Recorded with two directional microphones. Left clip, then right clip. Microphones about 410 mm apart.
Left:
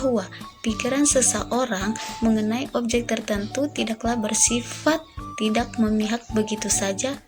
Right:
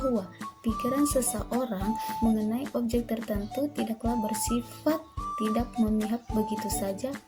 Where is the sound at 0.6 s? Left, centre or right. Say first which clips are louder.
Left 5 dB; right.